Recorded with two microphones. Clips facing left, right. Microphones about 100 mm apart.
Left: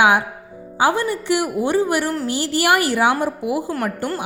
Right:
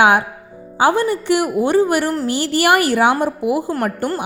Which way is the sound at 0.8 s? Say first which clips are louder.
Right 3 dB; 55° right (ahead or behind).